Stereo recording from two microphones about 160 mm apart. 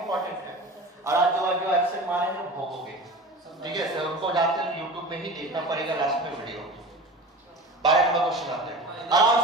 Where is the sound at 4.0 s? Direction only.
30° right (ahead or behind).